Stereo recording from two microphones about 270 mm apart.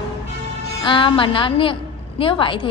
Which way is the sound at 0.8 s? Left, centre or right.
Centre.